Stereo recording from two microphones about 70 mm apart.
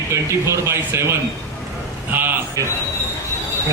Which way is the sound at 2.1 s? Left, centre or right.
Right.